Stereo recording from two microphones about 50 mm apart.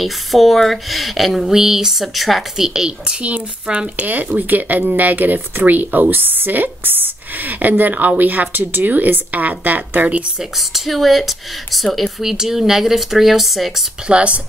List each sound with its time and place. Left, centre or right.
0.0 s speech: centre
3.2 s speech: right
10.7 s speech: centre
14.0 s speech: right